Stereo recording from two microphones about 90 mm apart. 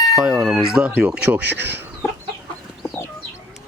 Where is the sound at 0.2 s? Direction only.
10° right (ahead or behind).